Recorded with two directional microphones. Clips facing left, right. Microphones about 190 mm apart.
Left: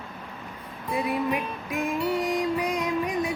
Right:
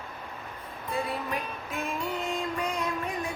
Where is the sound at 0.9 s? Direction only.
15° left (ahead or behind).